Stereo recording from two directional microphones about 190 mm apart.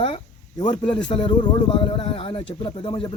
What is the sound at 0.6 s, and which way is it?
Speech, 25° left (ahead or behind).